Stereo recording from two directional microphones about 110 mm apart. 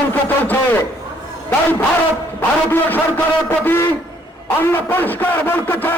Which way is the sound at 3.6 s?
20° left (ahead or behind).